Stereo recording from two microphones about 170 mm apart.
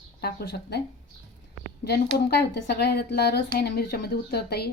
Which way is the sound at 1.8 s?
70° left (ahead or behind).